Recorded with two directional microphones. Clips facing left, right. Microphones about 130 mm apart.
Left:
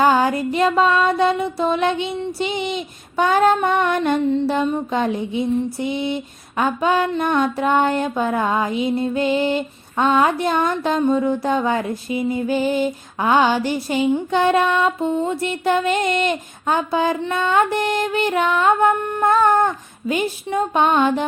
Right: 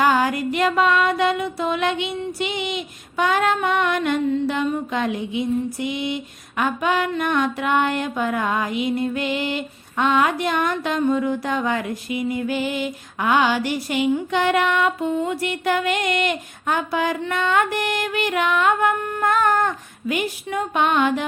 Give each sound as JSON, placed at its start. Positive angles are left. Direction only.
{"t": 0.0, "sound": "female singing", "side_deg": 30}